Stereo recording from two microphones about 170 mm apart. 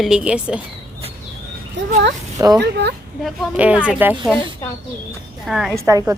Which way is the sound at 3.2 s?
5° right (ahead or behind).